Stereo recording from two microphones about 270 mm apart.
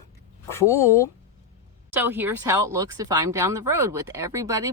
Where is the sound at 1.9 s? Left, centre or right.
Centre.